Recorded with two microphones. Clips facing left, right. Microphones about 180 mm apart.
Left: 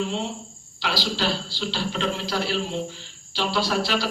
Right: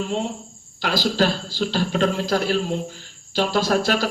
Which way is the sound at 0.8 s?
45° right (ahead or behind).